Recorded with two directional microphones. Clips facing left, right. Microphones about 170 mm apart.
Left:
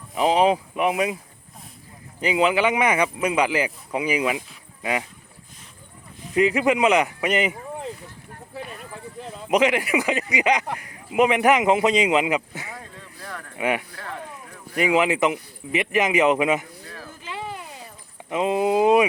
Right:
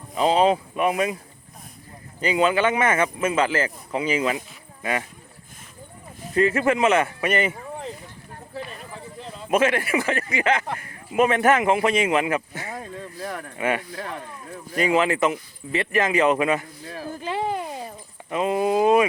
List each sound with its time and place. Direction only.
0.2 s speech: 15° left (ahead or behind)
2.2 s speech: 15° left (ahead or behind)
6.3 s speech: 15° left (ahead or behind)
9.5 s speech: 15° left (ahead or behind)
17.1 s a sound: 40° right (ahead or behind)
18.3 s speech: 20° left (ahead or behind)